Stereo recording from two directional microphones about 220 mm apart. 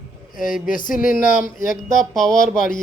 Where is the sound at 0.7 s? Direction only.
40° left (ahead or behind).